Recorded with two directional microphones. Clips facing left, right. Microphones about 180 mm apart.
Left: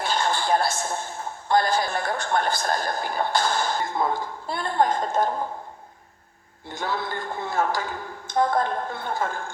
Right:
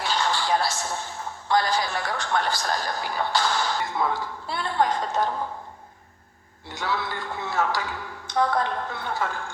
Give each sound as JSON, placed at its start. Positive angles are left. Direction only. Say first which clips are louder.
{"t": 0.0, "sound": "a man's voice", "louder": "left 1 dB", "side_deg": 50}
{"t": 6.7, "sound": "a man's voice", "louder": "even", "side_deg": 50}